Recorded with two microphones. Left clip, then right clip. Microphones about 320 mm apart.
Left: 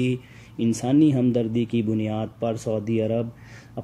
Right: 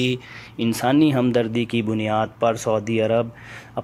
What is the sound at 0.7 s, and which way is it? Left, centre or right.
Speech, right.